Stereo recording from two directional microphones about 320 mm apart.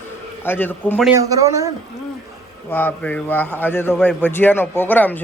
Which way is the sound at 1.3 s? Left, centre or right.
Centre.